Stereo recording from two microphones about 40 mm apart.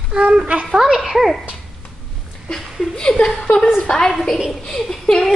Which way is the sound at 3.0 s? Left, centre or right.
Centre.